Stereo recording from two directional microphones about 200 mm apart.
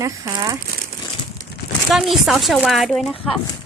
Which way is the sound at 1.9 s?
Centre (ahead or behind).